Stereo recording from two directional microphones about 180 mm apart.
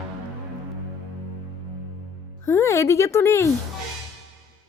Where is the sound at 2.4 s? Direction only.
15° left (ahead or behind).